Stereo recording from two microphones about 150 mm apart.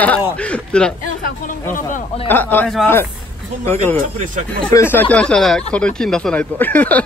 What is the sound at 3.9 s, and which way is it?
Speech, 65° right (ahead or behind).